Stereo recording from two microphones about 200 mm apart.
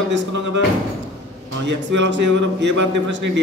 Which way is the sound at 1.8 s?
65° right (ahead or behind).